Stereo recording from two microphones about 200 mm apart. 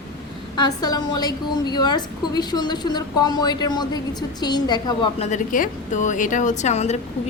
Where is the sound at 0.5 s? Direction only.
20° left (ahead or behind).